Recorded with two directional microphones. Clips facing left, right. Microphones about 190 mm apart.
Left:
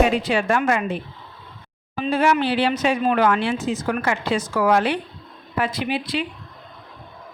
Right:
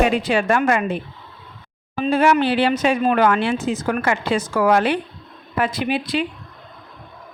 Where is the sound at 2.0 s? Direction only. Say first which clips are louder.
Right 3 dB; 50° right (ahead or behind).